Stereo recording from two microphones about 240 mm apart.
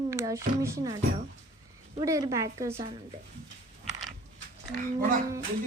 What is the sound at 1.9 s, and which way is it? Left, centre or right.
Speech, centre.